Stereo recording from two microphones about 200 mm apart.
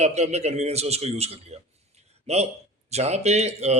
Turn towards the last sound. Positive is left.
turn(degrees=-35)  # may be behind; listen again after turning